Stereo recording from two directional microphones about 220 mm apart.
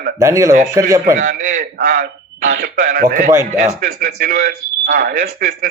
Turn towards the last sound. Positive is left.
turn(degrees=-40)  # may be behind; listen again after turning